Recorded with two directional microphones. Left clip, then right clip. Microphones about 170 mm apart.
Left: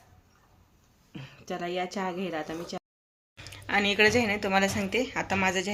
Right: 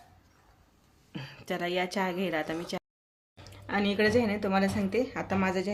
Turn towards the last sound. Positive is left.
turn(degrees=-10)  # may be behind; listen again after turning